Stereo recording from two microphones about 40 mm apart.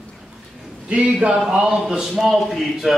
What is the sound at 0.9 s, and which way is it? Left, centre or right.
Speech, right.